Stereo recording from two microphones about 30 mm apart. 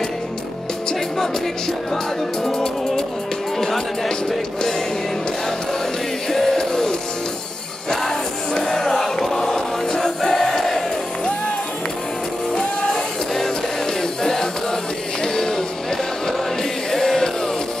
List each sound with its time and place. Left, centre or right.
2.5 s music: left
3.5 s speech: centre
6.3 s music: centre
8.5 s music: left
12.5 s music: centre
14.2 s chant: centre
15.2 s music: centre
16.9 s music: centre